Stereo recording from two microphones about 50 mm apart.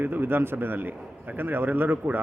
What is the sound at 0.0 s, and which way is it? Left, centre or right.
A man's voice, right.